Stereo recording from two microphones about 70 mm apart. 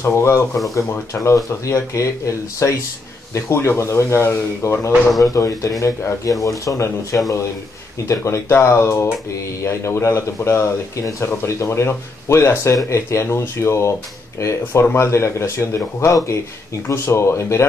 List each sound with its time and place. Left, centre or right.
0.0 s speech: left
5.2 s speech: left